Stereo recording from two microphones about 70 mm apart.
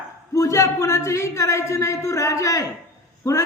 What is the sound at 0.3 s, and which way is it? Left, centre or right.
A man's voice, left.